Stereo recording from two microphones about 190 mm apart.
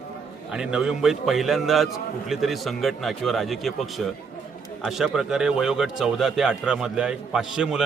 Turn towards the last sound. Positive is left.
turn(degrees=-5)  # may be behind; listen again after turning